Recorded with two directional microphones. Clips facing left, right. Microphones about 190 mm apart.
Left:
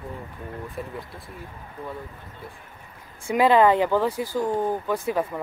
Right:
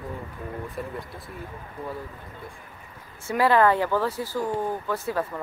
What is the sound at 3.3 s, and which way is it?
Speech, 20° left (ahead or behind).